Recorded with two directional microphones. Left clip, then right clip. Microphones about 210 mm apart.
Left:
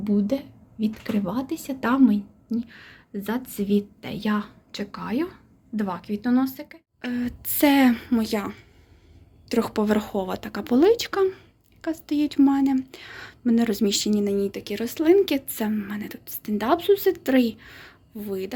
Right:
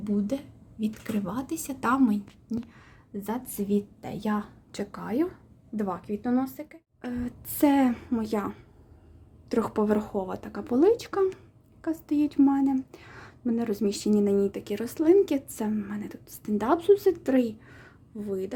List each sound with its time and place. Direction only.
0.0 s a woman's voice: centre (ahead or behind)